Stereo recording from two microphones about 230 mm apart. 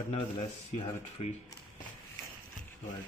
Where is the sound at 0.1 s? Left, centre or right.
Left.